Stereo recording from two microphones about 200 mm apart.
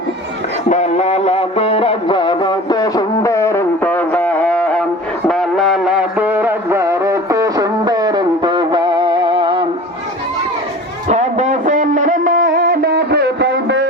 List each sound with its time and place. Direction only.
0.7 s music: 35° left (ahead or behind); by 9.6 s 25° right (ahead or behind)
11.1 s music: 35° right (ahead or behind); by 13.8 s 60° right (ahead or behind)